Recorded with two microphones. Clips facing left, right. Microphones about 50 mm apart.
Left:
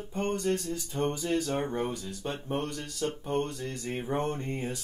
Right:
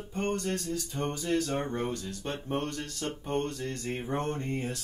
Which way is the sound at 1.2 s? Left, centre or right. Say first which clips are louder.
Even; centre.